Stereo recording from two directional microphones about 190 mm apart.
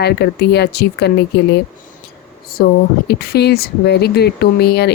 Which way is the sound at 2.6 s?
55° left (ahead or behind).